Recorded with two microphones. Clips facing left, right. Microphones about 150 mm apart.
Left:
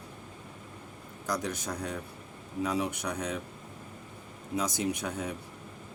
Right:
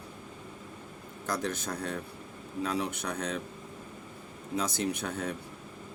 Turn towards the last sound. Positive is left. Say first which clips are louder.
# even
turn(degrees=15)  # may be behind; listen again after turning